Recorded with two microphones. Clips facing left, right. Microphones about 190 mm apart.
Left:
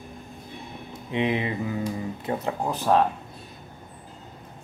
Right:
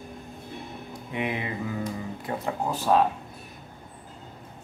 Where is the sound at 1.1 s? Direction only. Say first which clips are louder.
Left 5 dB; 20° left (ahead or behind).